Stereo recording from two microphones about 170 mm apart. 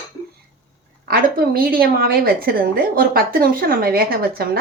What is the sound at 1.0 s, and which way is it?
A woman's voice, 60° right (ahead or behind).